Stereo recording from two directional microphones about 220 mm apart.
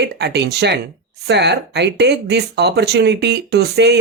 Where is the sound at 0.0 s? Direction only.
50° right (ahead or behind).